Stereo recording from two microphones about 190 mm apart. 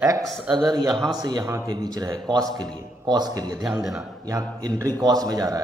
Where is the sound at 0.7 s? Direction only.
20° right (ahead or behind).